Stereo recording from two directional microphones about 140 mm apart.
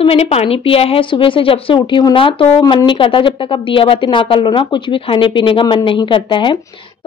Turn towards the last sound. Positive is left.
turn(degrees=35)  # may be behind; listen again after turning